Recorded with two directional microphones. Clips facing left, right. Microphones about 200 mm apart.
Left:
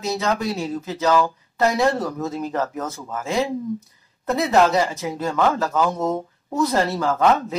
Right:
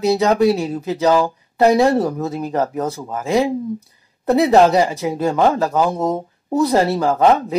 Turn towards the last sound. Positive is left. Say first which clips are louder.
# right 4 dB
turn(degrees=-35)  # may be behind; listen again after turning